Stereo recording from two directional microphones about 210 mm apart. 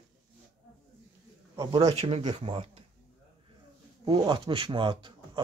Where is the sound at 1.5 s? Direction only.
20° right (ahead or behind).